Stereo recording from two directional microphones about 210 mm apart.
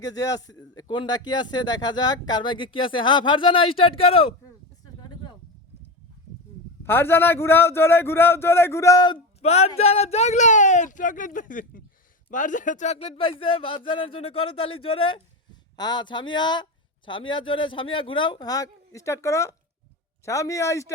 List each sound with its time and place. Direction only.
0.0 s speech: 15° left (ahead or behind)
4.9 s a sound: 20° left (ahead or behind)
6.8 s speech: 10° left (ahead or behind)